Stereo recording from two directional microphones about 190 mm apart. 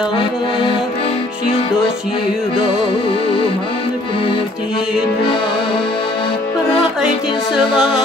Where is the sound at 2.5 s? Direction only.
30° left (ahead or behind).